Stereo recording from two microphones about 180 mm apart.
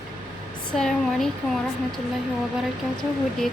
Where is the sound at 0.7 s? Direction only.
5° left (ahead or behind).